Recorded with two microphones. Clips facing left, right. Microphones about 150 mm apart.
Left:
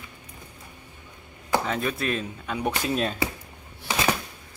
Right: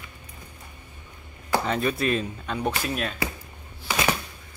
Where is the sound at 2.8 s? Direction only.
30° left (ahead or behind).